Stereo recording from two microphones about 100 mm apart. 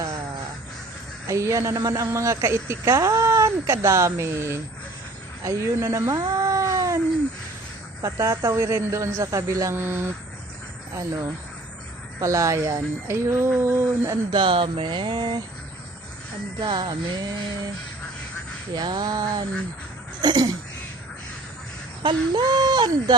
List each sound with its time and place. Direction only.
1.3 s speech: 30° right (ahead or behind)
6.1 s cat: 35° right (ahead or behind)
8.0 s speech: 30° right (ahead or behind)
12.2 s speech: 30° right (ahead or behind)
14.3 s a sound: 55° right (ahead or behind)
16.6 s speech: 50° right (ahead or behind)
18.7 s speech: 45° right (ahead or behind)
22.0 s speech: 50° right (ahead or behind)